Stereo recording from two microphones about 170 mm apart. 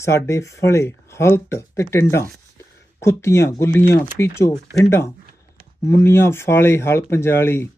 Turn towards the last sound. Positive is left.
turn(degrees=15)  # may be behind; listen again after turning